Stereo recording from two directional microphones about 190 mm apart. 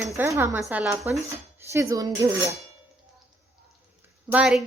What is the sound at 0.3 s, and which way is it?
A woman's voice, 15° right (ahead or behind).